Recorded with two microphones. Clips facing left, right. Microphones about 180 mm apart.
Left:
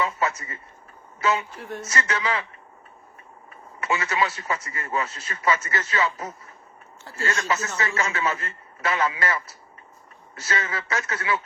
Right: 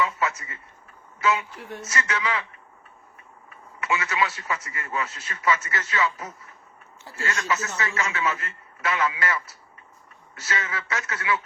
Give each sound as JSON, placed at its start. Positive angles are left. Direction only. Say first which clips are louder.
{"t": 0.0, "sound": "a sound", "louder": "even", "side_deg": 35}
{"t": 1.2, "sound": "a man's voice", "louder": "even", "side_deg": 35}
{"t": 3.5, "sound": "a man's voice", "louder": "left 1 dB", "side_deg": 35}
{"t": 10.5, "sound": "a man's voice", "louder": "left 2 dB", "side_deg": 35}